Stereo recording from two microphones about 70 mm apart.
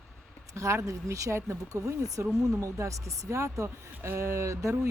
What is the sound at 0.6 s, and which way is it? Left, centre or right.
Speech, right.